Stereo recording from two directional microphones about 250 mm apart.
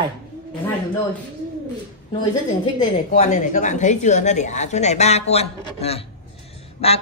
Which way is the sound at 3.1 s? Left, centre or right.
Left.